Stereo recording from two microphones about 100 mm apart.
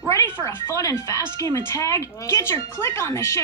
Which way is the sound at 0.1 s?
30° left (ahead or behind).